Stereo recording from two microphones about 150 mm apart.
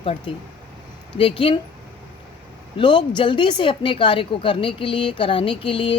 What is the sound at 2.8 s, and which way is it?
Speech, 30° left (ahead or behind).